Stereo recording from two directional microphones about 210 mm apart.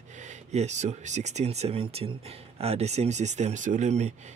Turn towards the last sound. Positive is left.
turn(degrees=-30)  # may be behind; listen again after turning